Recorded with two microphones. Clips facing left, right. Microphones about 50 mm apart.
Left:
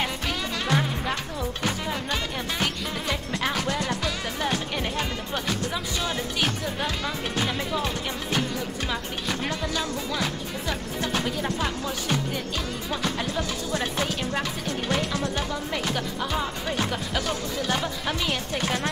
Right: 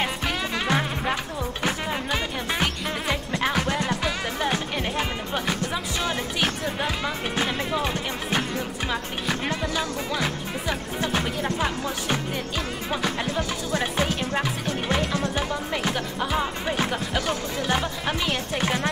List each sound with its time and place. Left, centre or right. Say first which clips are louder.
0.0 s music: right 2 dB; centre
8.9 s speech: right 4 dB; centre
9.5 s music: right 2 dB; centre
11.4 s speech: right 2 dB; centre
13.3 s music: right 2 dB; right
15.3 s music: right 2 dB; centre
18.6 s speech: right 3 dB; right